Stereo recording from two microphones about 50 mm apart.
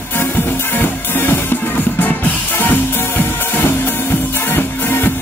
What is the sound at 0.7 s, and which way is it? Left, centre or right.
Music, left.